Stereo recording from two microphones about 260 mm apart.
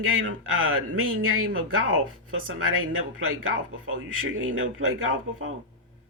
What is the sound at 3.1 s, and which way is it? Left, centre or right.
Speech, right.